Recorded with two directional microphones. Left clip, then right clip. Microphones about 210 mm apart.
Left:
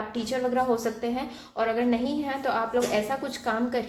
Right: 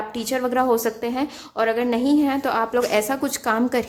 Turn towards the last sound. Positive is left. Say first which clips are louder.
# right 6 dB
turn(degrees=-40)  # may be behind; listen again after turning